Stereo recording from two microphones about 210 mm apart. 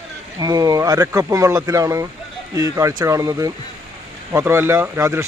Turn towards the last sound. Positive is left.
turn(degrees=-10)  # may be behind; listen again after turning